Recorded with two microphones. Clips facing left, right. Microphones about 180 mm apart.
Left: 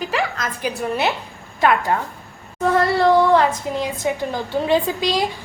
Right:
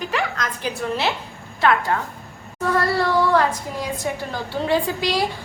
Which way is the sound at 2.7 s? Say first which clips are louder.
Left 5 dB; 20° left (ahead or behind).